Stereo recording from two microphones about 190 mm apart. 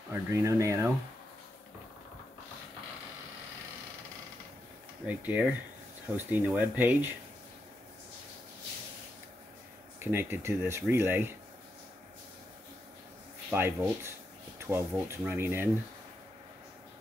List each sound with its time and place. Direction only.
0.1 s speech: 15° right (ahead or behind)
5.0 s speech: 10° right (ahead or behind)
9.9 s speech: 10° right (ahead or behind)
13.5 s speech: 10° right (ahead or behind)